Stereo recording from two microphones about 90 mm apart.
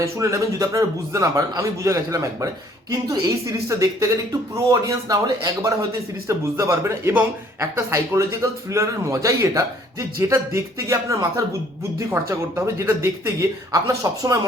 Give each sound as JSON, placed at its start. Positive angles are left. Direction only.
{"t": 0.0, "sound": "a man's voice", "side_deg": -35}
{"t": 6.2, "sound": "a man's voice", "side_deg": -35}